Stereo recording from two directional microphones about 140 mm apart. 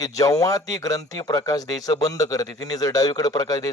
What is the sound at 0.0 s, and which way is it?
A man's voice, 25° left (ahead or behind).